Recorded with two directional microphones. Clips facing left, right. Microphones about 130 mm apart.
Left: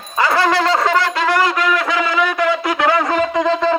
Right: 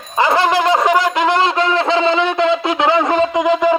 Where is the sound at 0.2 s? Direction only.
20° right (ahead or behind).